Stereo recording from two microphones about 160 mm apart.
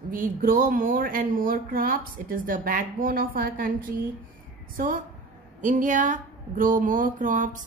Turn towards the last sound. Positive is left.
turn(degrees=-55)  # may be behind; listen again after turning